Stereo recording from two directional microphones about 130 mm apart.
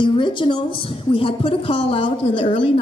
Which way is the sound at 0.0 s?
40° left (ahead or behind).